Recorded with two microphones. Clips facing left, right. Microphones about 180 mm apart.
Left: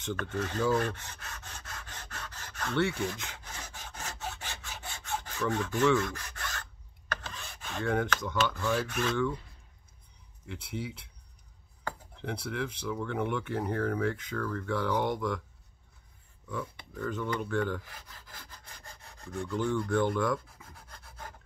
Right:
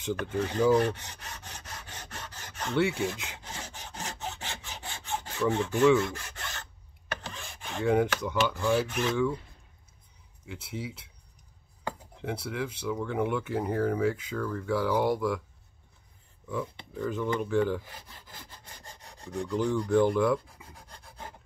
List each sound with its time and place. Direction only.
0.0 s rub: 10° right (ahead or behind)
4.2 s sawing: 20° right (ahead or behind)
7.2 s speech: 15° right (ahead or behind)
10.4 s speech: 5° right (ahead or behind)
12.2 s speech: 5° right (ahead or behind)
16.9 s speech: 10° right (ahead or behind)
18.3 s rub: 15° right (ahead or behind)